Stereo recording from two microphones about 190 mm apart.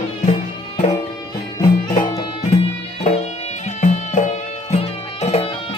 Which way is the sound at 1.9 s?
20° left (ahead or behind).